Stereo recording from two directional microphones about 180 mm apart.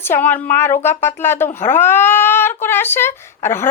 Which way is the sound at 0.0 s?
10° left (ahead or behind).